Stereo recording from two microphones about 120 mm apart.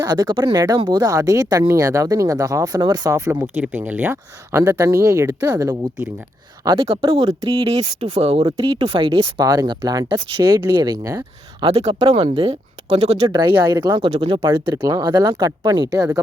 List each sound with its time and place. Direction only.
0.0 s speech: 35° right (ahead or behind)
6.7 s speech: 50° right (ahead or behind)
9.4 s speech: 30° right (ahead or behind)
10.1 s speech: 45° right (ahead or behind)
11.6 s speech: 60° right (ahead or behind)
13.3 s speech: 40° right (ahead or behind)
14.5 s speech: 20° right (ahead or behind)
14.9 s speech: 35° right (ahead or behind)